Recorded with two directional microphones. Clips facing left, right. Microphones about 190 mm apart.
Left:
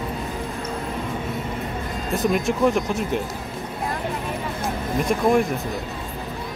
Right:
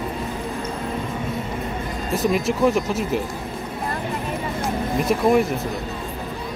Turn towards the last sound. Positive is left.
turn(degrees=-5)  # may be behind; listen again after turning